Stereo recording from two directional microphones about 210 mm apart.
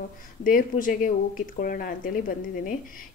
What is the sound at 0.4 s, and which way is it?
Speech, 40° left (ahead or behind).